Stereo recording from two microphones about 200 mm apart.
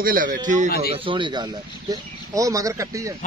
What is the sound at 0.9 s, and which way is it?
Speech, 25° right (ahead or behind).